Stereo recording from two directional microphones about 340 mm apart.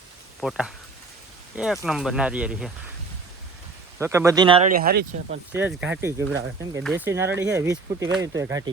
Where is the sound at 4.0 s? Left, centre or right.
Centre; by 5.3 s right.